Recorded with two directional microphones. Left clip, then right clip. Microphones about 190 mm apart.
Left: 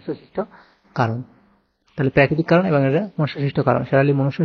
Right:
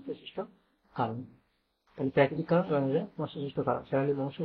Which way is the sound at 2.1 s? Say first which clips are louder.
Left 10 dB; 40° left (ahead or behind).